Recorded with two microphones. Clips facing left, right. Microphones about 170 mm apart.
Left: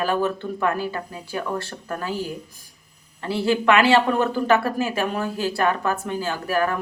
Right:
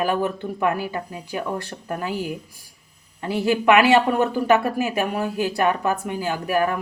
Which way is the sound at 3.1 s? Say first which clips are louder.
Even; 15° right (ahead or behind).